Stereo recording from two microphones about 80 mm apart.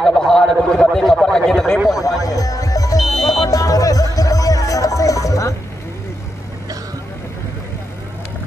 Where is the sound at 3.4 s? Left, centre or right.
Left.